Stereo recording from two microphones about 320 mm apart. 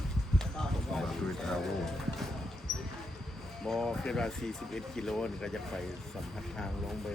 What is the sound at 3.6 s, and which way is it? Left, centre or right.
Speech, centre.